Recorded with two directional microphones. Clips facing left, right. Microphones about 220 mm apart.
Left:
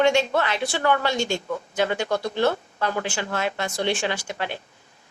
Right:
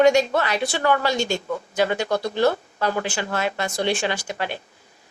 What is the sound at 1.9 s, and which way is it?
Speech, 40° right (ahead or behind).